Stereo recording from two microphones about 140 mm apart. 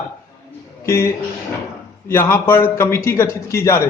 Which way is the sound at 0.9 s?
20° left (ahead or behind).